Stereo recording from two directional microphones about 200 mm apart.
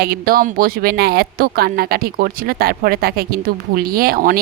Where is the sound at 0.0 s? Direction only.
50° right (ahead or behind).